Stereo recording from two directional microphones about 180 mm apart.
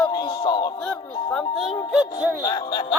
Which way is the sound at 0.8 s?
5° left (ahead or behind).